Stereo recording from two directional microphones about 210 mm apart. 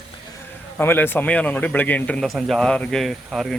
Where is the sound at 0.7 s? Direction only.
10° left (ahead or behind).